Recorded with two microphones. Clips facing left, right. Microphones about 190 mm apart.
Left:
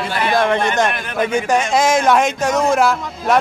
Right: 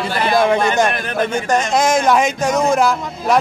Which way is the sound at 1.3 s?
5° left (ahead or behind).